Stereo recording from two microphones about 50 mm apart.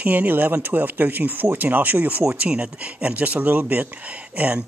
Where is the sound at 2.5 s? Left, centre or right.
Right.